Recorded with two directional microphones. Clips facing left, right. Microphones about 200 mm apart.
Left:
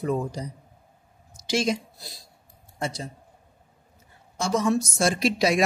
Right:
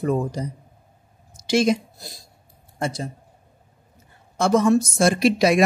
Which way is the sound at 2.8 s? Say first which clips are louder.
Right 4 dB; 55° right (ahead or behind).